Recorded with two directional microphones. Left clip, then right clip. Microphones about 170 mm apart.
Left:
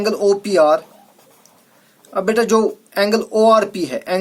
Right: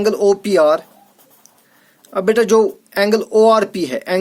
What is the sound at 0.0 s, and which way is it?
Speech, 55° right (ahead or behind).